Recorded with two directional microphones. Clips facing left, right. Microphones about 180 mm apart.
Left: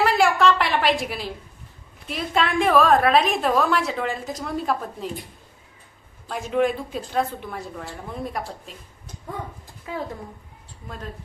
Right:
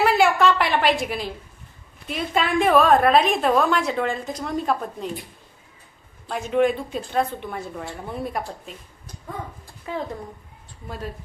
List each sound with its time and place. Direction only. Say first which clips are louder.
0.0 s a sound: right 1 dB; centre (ahead or behind)
2.0 s a woman's voice: even; centre (ahead or behind)
6.2 s a woman's voice: right 2 dB; centre (ahead or behind)
10.8 s a woman's voice: right 3 dB; 5° right (ahead or behind)